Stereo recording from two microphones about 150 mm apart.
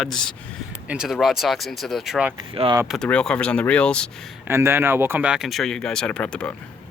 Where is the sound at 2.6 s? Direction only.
40° right (ahead or behind).